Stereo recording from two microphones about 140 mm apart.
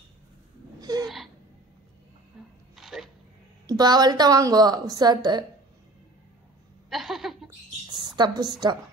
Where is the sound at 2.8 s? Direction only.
Centre (ahead or behind).